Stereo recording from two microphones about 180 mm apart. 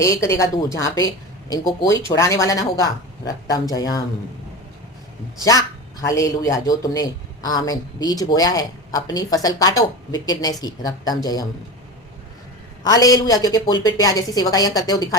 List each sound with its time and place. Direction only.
0.0 s a woman's voice: 15° left (ahead or behind)
5.4 s a man's voice: 20° left (ahead or behind)
12.8 s a man's voice: 20° left (ahead or behind)